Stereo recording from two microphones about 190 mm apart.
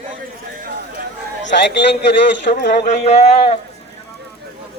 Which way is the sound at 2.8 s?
35° left (ahead or behind).